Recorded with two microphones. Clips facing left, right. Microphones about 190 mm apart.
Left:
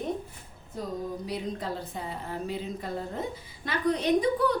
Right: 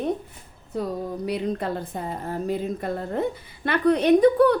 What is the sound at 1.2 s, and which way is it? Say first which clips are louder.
A woman's voice: right 7 dB; 60° right (ahead or behind).